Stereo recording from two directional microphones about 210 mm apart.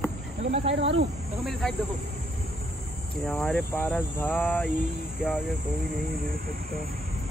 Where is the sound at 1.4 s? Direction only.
Centre (ahead or behind).